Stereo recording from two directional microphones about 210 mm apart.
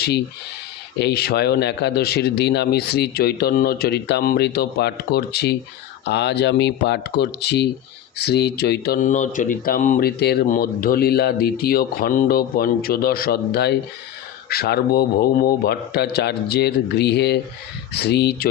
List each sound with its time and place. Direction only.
0.9 s speech: 50° left (ahead or behind)